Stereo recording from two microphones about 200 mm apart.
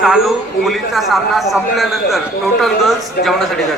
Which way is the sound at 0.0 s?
Centre (ahead or behind).